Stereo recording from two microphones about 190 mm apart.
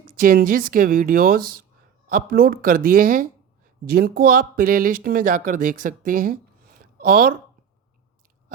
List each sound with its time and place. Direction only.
0.2 s speech: 50° right (ahead or behind)